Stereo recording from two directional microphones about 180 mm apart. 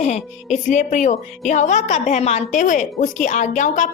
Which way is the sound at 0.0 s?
40° left (ahead or behind).